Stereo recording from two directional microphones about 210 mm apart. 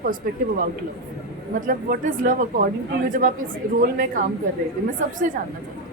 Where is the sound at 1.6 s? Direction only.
40° right (ahead or behind).